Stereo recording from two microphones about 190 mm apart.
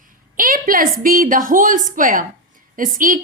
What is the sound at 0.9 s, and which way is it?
A woman's voice, 45° right (ahead or behind).